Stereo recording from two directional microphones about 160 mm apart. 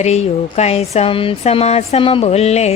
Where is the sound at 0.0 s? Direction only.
45° left (ahead or behind).